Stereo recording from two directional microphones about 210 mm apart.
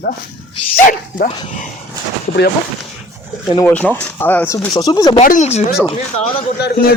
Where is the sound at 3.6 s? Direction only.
10° left (ahead or behind).